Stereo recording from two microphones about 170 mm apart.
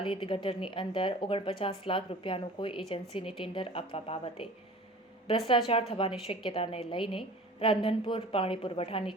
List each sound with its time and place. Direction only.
0.0 s speech: 30° left (ahead or behind)
5.5 s speech: 35° left (ahead or behind)